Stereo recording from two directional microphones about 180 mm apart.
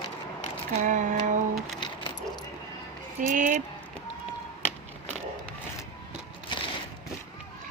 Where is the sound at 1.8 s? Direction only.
25° left (ahead or behind).